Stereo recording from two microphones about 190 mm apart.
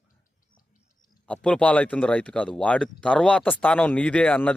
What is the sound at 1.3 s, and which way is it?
Speech, 5° left (ahead or behind).